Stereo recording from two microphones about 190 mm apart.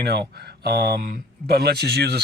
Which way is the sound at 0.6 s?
60° right (ahead or behind).